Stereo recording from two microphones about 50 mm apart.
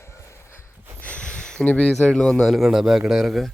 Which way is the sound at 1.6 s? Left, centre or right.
Left.